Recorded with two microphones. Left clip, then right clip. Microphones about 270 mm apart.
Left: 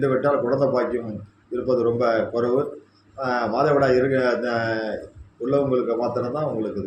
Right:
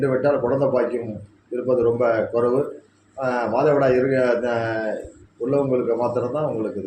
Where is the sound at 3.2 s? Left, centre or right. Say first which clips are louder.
Right 1 dB; centre.